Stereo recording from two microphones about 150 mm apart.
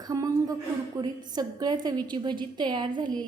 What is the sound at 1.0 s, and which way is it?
A woman's voice, 25° right (ahead or behind).